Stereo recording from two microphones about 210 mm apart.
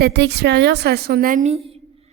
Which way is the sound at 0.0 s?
55° right (ahead or behind).